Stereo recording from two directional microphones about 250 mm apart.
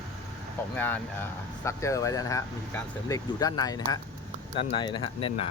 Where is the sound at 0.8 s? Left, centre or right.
Centre.